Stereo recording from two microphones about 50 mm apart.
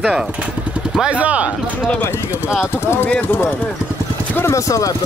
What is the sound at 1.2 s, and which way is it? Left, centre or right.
Speech, right.